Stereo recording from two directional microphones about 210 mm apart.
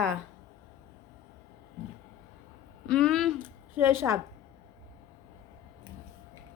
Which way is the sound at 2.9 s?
5° left (ahead or behind).